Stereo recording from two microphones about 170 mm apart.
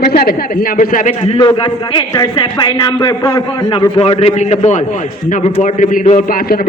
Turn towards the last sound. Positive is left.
turn(degrees=60)  # may be behind; listen again after turning